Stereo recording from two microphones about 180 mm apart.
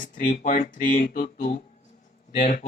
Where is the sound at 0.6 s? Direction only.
45° left (ahead or behind).